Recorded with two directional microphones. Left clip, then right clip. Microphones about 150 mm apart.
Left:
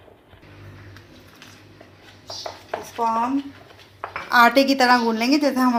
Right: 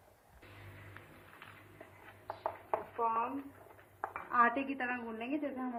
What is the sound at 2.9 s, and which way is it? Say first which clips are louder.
Speech: left 13 dB; 20° left (ahead or behind).